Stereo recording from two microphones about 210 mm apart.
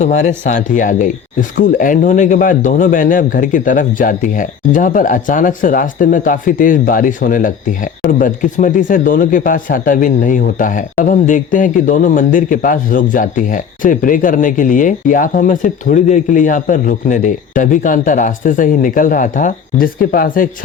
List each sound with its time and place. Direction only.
0.0 s speech: 35° left (ahead or behind)